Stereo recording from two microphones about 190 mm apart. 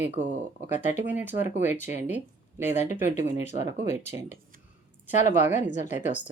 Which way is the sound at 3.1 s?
35° left (ahead or behind).